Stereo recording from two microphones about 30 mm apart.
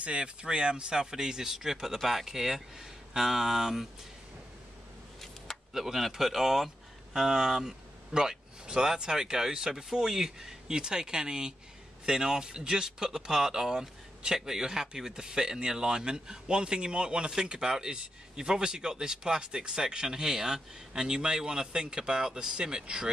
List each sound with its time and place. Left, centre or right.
0.0 s speech: right
1.1 s speech: centre
5.7 s speech: centre
8.1 s speech: right